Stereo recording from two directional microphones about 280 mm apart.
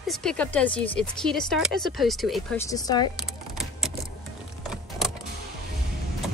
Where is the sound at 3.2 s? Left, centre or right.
Centre.